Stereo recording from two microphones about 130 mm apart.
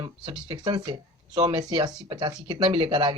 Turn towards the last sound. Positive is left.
turn(degrees=-40)  # may be behind; listen again after turning